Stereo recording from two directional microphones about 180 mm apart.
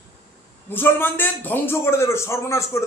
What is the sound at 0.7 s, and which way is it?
A man's voice, 10° left (ahead or behind).